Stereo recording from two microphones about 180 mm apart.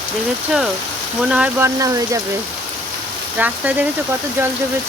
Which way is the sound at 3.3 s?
10° right (ahead or behind).